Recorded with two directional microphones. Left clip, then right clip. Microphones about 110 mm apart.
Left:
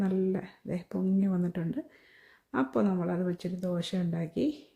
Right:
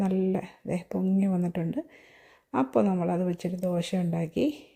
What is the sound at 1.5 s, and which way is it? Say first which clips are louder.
A woman's voice: right 4 dB; 15° right (ahead or behind).